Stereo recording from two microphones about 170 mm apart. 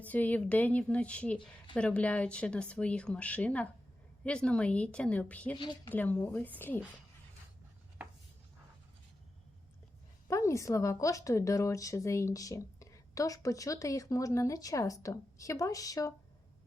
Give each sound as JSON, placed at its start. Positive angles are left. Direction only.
{"t": 0.0, "sound": "speech", "side_deg": 10}
{"t": 5.5, "sound": "a woman's voice", "side_deg": 25}
{"t": 5.9, "sound": "speech", "side_deg": 10}
{"t": 10.2, "sound": "a woman's voice", "side_deg": 15}